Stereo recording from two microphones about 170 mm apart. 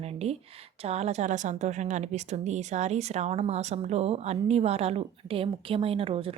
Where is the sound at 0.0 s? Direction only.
40° right (ahead or behind).